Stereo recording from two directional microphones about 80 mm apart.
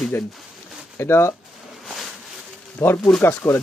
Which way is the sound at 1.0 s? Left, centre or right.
Left.